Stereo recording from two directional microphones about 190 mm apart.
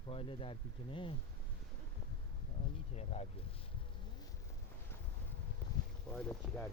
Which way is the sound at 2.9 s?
35° left (ahead or behind).